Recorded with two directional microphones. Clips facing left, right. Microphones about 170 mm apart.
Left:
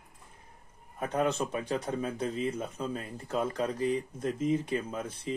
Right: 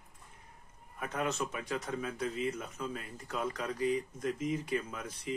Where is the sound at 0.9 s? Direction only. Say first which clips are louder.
Left 6 dB; 35° left (ahead or behind).